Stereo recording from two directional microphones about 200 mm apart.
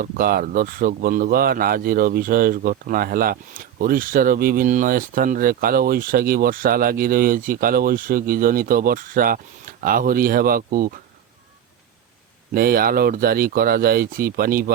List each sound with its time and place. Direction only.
0.0 s speech: 45° right (ahead or behind)
12.5 s speech: 45° right (ahead or behind)